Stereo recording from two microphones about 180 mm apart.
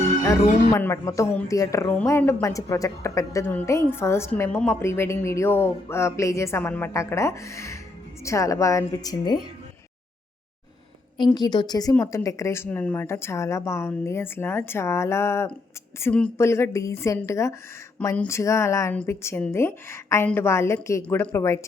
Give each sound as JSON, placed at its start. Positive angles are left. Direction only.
{"t": 0.7, "sound": "a woman's voice", "side_deg": 15}
{"t": 11.3, "sound": "a woman's voice", "side_deg": 25}